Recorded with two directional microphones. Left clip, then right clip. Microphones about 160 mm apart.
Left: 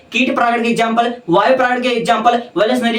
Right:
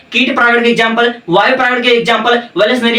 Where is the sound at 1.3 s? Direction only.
25° left (ahead or behind).